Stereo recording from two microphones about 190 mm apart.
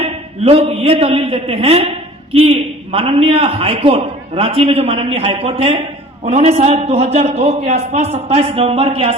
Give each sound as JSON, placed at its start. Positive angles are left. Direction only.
{"t": 0.0, "sound": "a man's voice", "side_deg": -30}